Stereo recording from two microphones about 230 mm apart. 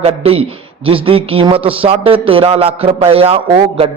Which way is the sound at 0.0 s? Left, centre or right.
Right.